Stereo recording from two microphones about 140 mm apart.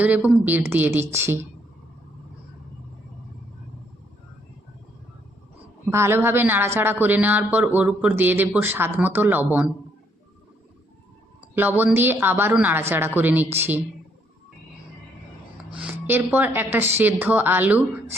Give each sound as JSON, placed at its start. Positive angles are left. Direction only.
{"t": 0.0, "sound": "a man's voice", "side_deg": -10}
{"t": 5.9, "sound": "a man's voice", "side_deg": -20}
{"t": 11.5, "sound": "a man's voice", "side_deg": -15}
{"t": 15.7, "sound": "a man's voice", "side_deg": -10}